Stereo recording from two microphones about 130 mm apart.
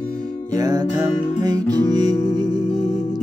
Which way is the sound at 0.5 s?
30° right (ahead or behind).